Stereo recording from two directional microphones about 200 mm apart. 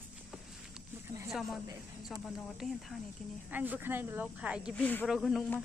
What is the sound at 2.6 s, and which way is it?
Speech, centre (ahead or behind).